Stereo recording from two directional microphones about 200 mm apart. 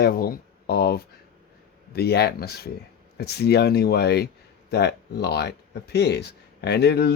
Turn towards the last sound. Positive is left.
turn(degrees=55)  # may be behind; listen again after turning